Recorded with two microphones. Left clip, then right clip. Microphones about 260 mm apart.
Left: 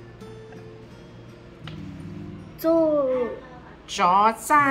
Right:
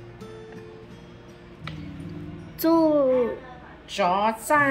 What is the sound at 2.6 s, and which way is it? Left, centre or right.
Speech, right.